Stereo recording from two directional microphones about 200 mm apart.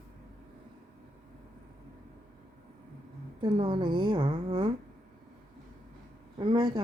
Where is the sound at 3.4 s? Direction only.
25° right (ahead or behind).